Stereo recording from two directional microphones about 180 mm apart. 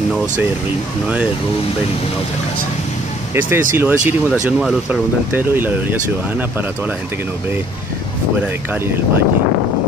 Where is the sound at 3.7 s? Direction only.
10° right (ahead or behind).